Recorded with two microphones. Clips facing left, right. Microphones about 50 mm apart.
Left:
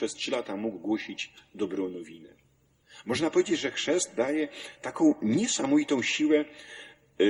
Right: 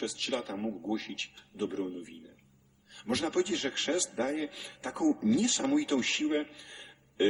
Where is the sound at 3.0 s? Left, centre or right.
Left.